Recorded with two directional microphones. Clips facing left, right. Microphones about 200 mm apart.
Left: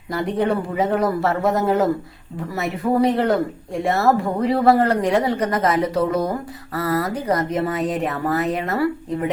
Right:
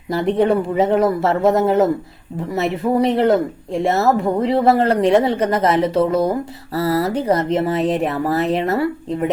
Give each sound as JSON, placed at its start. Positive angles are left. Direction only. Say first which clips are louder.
{"t": 0.1, "sound": "speech", "louder": "right 5 dB", "side_deg": -25}